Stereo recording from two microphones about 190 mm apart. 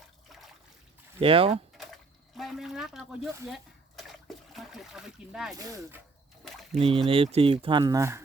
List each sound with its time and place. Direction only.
1.2 s speech: 30° right (ahead or behind)
1.8 s speech: centre (ahead or behind)
5.5 s speech: 15° right (ahead or behind)
6.7 s speech: 30° right (ahead or behind)